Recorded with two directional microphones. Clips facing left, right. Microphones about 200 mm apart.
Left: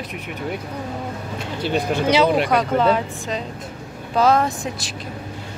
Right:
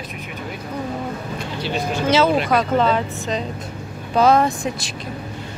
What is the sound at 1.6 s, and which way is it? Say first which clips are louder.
Speech: left 3 dB; 50° left (ahead or behind).